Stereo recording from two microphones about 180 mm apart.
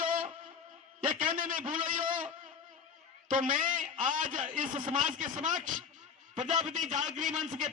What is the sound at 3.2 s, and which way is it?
A man's voice, 45° right (ahead or behind).